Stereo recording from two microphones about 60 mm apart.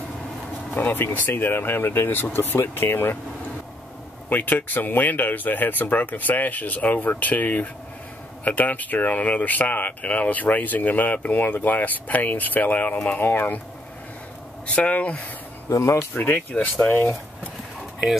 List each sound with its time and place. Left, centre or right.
0.7 s speech: left
4.3 s speech: left
14.8 s speech: left
15.7 s speech: left
16.2 s speech: left
16.9 s speech: left